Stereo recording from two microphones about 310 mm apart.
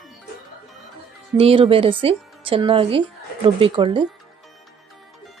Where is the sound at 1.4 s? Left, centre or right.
Centre.